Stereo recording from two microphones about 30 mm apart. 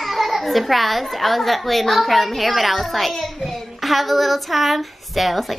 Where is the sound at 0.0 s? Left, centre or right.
Centre.